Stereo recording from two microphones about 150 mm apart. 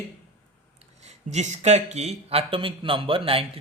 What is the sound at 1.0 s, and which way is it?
Speech, 50° right (ahead or behind).